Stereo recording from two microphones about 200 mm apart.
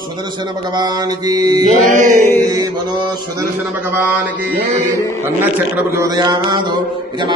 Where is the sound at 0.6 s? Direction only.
20° right (ahead or behind).